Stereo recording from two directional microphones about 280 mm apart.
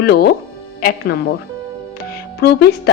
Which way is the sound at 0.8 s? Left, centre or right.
Left.